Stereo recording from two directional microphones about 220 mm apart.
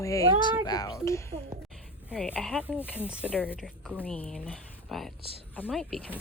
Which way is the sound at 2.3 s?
5° left (ahead or behind).